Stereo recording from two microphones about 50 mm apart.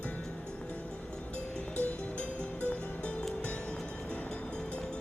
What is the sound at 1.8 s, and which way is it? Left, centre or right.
Music, left.